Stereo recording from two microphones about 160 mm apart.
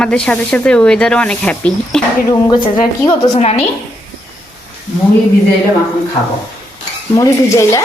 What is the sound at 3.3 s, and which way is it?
Speech, 40° left (ahead or behind).